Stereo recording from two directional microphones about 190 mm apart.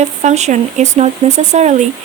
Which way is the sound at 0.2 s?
35° right (ahead or behind).